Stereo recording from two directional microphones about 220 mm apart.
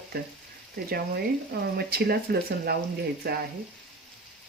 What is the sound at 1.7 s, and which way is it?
Speech, 45° right (ahead or behind).